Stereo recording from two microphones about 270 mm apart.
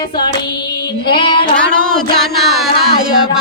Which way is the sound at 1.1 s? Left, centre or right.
Centre.